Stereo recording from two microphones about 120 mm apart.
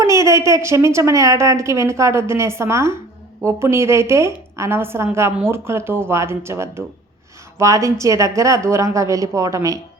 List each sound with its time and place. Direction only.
0.0 s a woman's voice: 25° right (ahead or behind)